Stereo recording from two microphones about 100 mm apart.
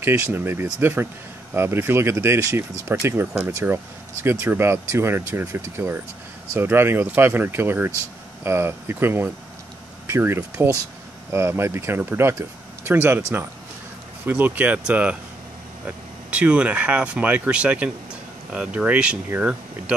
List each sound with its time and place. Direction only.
0.0 s speech: 25° right (ahead or behind)
14.2 s speech: 15° right (ahead or behind)
16.3 s speech: 10° right (ahead or behind)